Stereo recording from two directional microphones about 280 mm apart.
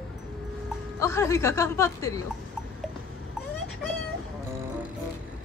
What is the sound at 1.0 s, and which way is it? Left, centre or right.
Speech, centre.